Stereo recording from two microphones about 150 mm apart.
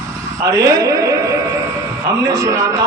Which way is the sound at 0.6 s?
20° right (ahead or behind).